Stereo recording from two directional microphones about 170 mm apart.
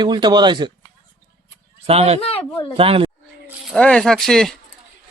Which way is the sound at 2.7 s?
35° right (ahead or behind).